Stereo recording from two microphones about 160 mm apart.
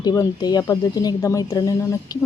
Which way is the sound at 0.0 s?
25° left (ahead or behind).